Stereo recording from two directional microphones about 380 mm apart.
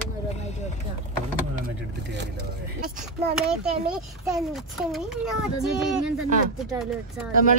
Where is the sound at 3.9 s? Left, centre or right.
Centre.